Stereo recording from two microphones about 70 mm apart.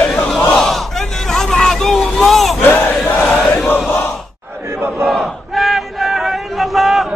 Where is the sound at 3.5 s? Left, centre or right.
Left.